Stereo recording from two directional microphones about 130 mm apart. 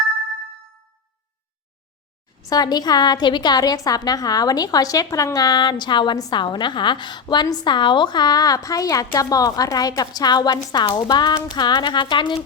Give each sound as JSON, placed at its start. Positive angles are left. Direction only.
{"t": 2.5, "sound": "a woman's voice", "side_deg": 30}